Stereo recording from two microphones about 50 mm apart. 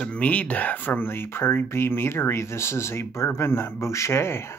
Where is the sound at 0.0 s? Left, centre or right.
Left.